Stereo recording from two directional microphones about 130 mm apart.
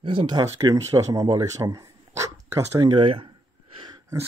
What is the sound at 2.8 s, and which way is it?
Speech, 40° right (ahead or behind).